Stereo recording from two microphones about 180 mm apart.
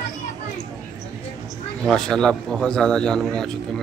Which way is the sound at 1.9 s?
5° left (ahead or behind).